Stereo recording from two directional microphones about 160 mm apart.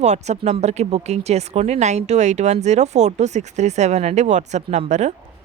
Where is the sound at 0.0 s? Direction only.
45° right (ahead or behind).